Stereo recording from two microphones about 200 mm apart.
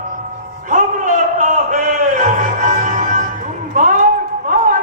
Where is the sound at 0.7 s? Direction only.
40° right (ahead or behind).